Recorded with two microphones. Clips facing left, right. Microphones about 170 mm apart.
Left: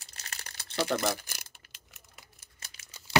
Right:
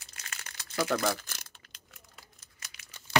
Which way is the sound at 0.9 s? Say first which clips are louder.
Right 1 dB; 5° left (ahead or behind).